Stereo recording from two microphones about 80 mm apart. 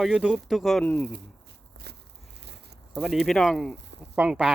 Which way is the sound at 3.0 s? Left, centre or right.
Centre.